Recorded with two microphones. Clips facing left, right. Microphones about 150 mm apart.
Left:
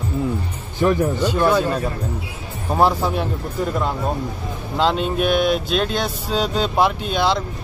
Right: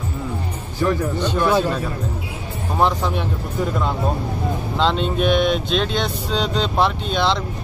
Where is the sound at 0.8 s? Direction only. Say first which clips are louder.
Left 3 dB; 10° left (ahead or behind).